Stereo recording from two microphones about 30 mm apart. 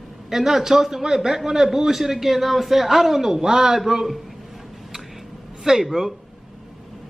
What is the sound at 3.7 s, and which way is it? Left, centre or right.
Speech, centre.